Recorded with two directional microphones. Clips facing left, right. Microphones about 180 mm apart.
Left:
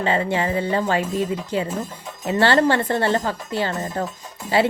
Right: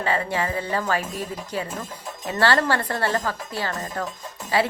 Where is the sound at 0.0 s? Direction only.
25° left (ahead or behind).